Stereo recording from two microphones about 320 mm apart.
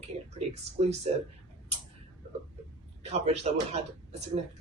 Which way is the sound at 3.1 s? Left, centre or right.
Centre.